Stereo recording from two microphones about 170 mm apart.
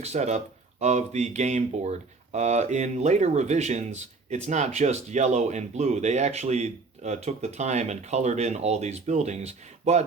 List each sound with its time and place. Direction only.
0.0 s speech: 40° right (ahead or behind)